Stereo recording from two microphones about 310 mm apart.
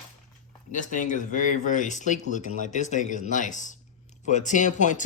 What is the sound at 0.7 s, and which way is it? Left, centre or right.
Speech, left.